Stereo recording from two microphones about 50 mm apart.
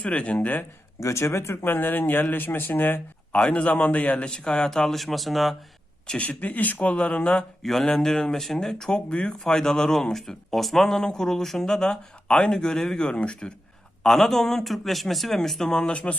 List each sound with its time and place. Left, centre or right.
0.0 s a man's voice: left
0.3 s speech: left
0.9 s speech: left
1.6 s speech: left
3.3 s a man's voice: left; by 5.5 s centre
6.1 s a man's voice: left
7.6 s a man's voice: centre
14.0 s speech: centre